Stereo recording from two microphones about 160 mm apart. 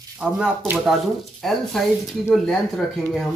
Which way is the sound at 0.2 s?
5° right (ahead or behind).